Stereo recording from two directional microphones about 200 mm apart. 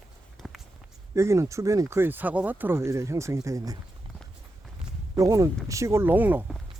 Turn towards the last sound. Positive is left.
turn(degrees=-10)  # may be behind; listen again after turning